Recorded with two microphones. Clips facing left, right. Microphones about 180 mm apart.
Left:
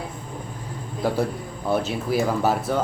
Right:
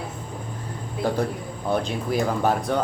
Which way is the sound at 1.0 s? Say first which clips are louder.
Left 1 dB; 5° left (ahead or behind).